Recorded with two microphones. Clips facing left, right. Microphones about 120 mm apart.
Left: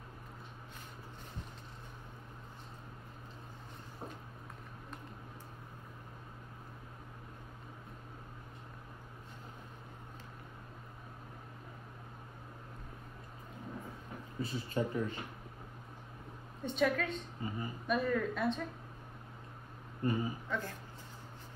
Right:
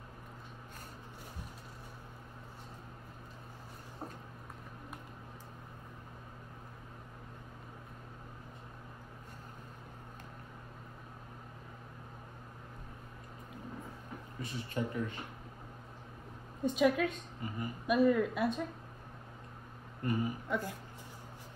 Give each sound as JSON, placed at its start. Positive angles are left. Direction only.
{"t": 14.4, "sound": "speech", "side_deg": 30}
{"t": 16.6, "sound": "a woman's voice", "side_deg": -10}
{"t": 17.4, "sound": "speech", "side_deg": 30}
{"t": 17.8, "sound": "a woman's voice", "side_deg": -10}
{"t": 20.0, "sound": "speech", "side_deg": 25}
{"t": 20.4, "sound": "speech", "side_deg": -10}